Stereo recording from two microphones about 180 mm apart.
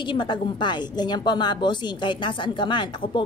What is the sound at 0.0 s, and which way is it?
A woman's voice, 25° left (ahead or behind).